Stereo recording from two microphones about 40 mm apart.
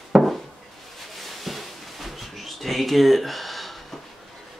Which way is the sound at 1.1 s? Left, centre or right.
Centre.